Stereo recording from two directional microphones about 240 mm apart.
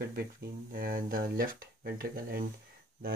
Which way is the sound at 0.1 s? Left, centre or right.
Right.